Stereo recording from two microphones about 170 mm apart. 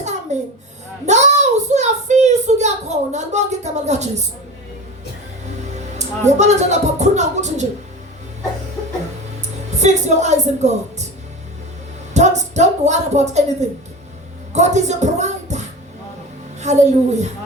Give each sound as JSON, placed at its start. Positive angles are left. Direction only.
{"t": 0.0, "sound": "a sound", "side_deg": -40}
{"t": 6.0, "sound": "a woman's voice", "side_deg": -40}
{"t": 9.7, "sound": "a woman's voice", "side_deg": -40}
{"t": 12.1, "sound": "speech", "side_deg": -40}
{"t": 14.5, "sound": "a woman's voice", "side_deg": -40}